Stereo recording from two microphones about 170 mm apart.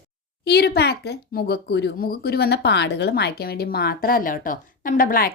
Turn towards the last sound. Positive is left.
turn(degrees=60)  # may be behind; listen again after turning